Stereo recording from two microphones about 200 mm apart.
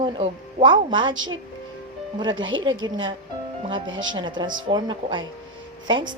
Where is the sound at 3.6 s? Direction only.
25° right (ahead or behind).